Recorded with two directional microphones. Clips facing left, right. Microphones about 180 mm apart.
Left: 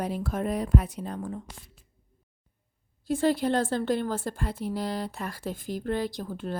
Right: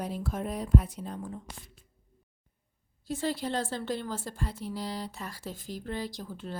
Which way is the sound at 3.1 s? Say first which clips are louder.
Left 7 dB; 55° left (ahead or behind).